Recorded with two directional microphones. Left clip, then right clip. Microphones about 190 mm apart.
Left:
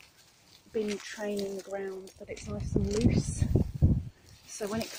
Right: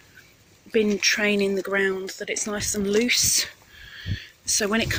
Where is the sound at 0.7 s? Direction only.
20° right (ahead or behind).